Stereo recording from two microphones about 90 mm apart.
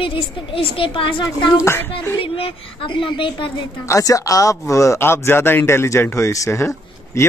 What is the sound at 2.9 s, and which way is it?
Speech, 70° left (ahead or behind).